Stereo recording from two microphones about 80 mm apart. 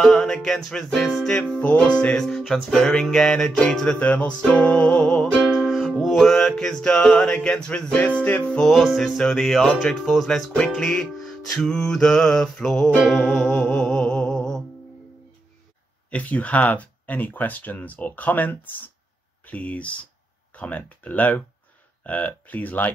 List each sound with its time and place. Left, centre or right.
0.0 s speech: centre
1.6 s music: centre
3.9 s speech: centre
4.4 s music: centre
8.5 s speech: centre
13.0 s music: centre
16.1 s speech: centre
19.4 s music: centre
20.5 s speech: centre